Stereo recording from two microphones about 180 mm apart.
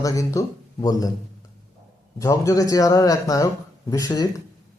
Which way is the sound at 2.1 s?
20° left (ahead or behind).